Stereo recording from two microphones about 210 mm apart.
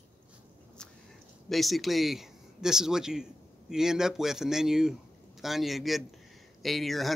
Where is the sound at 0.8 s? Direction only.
5° left (ahead or behind).